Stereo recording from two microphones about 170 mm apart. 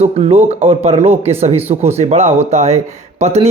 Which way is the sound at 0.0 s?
40° right (ahead or behind).